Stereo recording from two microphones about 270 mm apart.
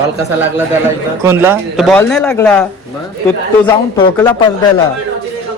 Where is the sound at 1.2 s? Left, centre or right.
Centre.